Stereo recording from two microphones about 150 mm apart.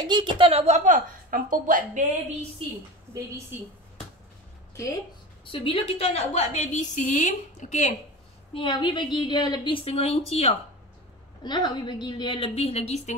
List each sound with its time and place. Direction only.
0.0 s speech: 30° right (ahead or behind)
0.4 s a woman's voice: 40° right (ahead or behind); by 2.0 s 60° right (ahead or behind)
3.1 s a woman's voice: 15° right (ahead or behind)
5.4 s a woman's voice: 35° left (ahead or behind); by 7.9 s 55° left (ahead or behind)
8.5 s a woman's voice: 30° left (ahead or behind)
9.8 s a woman's voice: 40° left (ahead or behind)
11.4 s a woman's voice: 30° left (ahead or behind); by 13.1 s 45° left (ahead or behind)